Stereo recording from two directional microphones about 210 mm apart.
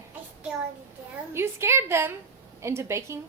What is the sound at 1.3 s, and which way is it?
A woman's voice, 10° right (ahead or behind).